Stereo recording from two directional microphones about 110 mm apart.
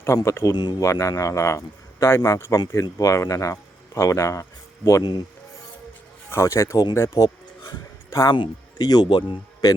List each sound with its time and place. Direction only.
0.0 s speech: 25° left (ahead or behind)
0.5 s speech: 40° left (ahead or behind)
0.9 s speech: 30° left (ahead or behind)
6.3 s speech: 25° left (ahead or behind)
6.9 s a sound: 30° left (ahead or behind)
8.4 s speech: 40° left (ahead or behind)